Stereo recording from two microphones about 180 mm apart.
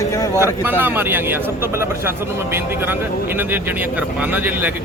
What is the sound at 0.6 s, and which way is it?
A man's voice, 10° right (ahead or behind).